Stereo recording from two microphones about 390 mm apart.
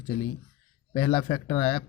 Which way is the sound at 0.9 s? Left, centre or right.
Centre.